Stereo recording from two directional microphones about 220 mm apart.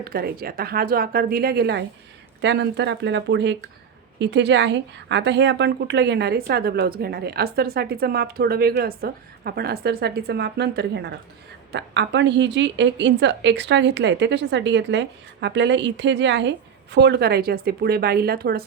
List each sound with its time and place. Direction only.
0.0 s a woman's voice: 45° right (ahead or behind)